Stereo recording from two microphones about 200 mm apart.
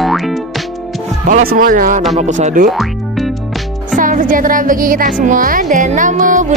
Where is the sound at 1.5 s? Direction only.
45° right (ahead or behind).